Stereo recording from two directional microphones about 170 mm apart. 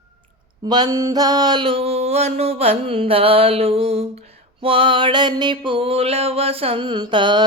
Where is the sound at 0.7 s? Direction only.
25° right (ahead or behind).